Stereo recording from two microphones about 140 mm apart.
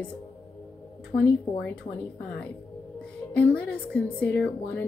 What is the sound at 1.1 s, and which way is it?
Speech, 35° left (ahead or behind).